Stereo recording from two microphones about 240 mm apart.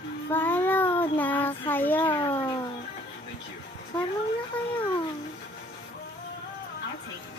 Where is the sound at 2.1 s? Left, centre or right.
Left.